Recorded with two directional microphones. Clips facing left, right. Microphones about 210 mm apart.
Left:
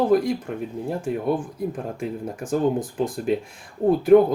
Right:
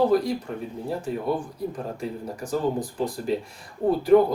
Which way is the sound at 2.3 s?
50° left (ahead or behind).